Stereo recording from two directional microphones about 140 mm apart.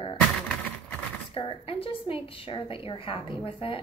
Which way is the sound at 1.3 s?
40° left (ahead or behind).